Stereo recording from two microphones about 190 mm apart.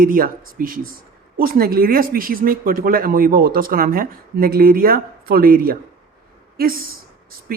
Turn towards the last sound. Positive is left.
turn(degrees=-50)  # may be behind; listen again after turning